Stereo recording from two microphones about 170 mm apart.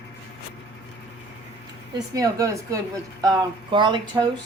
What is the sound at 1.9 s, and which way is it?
Speech, 20° right (ahead or behind).